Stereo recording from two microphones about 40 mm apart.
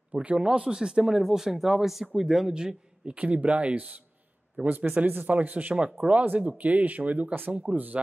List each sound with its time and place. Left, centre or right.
0.4 s speech: centre
2.5 s a man's voice: right
3.2 s speech: right
5.9 s speech: right
6.2 s speech: right